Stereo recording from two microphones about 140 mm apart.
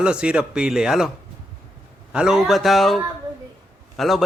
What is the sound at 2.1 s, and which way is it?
Speech, 5° right (ahead or behind).